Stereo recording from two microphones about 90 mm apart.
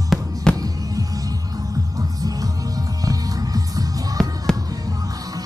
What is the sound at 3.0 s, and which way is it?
Music, 40° right (ahead or behind).